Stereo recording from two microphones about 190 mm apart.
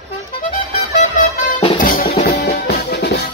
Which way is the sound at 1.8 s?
45° left (ahead or behind).